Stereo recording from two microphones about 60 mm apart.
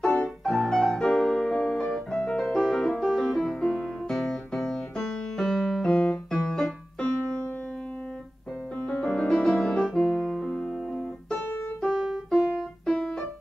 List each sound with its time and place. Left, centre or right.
0.4 s music: centre
8.8 s music: centre
10.1 s keyboard: centre
11.3 s keyboard: left
11.8 s piano: centre